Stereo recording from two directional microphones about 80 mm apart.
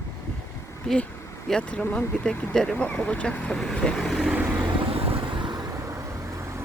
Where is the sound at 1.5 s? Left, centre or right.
Centre.